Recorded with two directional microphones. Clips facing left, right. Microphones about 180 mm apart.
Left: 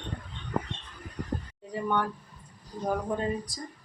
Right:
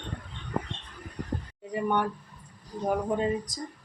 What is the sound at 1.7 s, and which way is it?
Speech, 20° right (ahead or behind).